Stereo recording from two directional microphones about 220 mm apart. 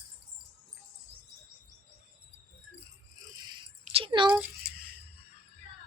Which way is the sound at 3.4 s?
20° right (ahead or behind).